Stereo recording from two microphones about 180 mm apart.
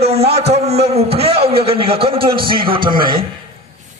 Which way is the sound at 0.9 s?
35° right (ahead or behind).